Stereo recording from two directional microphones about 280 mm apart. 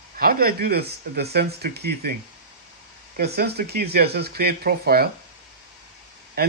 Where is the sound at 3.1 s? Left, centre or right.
Right.